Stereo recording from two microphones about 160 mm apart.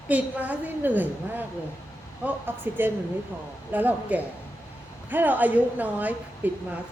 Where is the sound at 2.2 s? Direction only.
10° right (ahead or behind).